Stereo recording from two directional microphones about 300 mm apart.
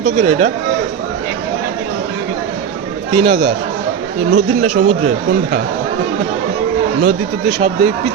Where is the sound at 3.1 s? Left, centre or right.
Centre.